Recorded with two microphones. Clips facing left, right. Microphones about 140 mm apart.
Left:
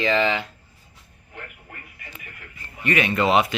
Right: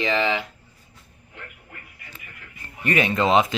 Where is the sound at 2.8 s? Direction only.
30° right (ahead or behind).